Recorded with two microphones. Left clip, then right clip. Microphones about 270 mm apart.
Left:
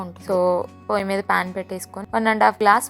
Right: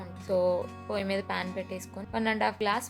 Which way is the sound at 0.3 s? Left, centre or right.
Centre.